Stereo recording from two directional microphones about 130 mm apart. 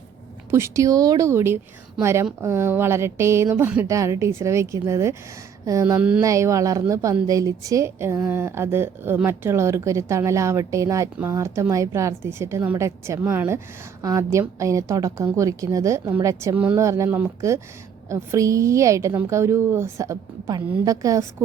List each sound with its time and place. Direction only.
0.5 s a woman's voice: 25° right (ahead or behind)
6.0 s speech: 10° right (ahead or behind)
6.2 s a woman's voice: 25° right (ahead or behind)